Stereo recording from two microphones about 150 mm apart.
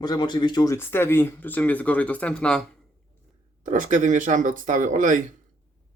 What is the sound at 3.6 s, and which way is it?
Speech, 60° right (ahead or behind).